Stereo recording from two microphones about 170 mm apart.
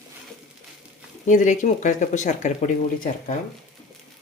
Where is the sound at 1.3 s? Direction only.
50° left (ahead or behind).